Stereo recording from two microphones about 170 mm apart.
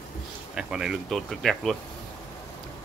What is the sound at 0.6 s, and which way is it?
Speech, 5° right (ahead or behind).